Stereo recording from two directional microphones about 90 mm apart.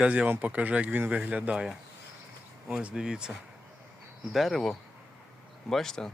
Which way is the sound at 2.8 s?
10° right (ahead or behind).